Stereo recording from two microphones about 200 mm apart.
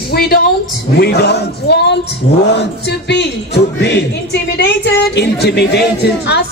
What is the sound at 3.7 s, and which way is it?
A woman's voice, 55° left (ahead or behind).